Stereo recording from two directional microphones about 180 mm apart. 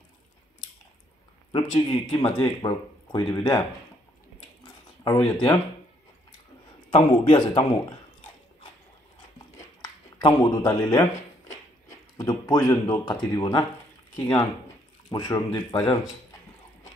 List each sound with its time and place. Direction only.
1.9 s speech: 25° left (ahead or behind)
5.0 s speech: 20° left (ahead or behind)
6.9 s speech: 30° left (ahead or behind)
10.2 s speech: 25° left (ahead or behind)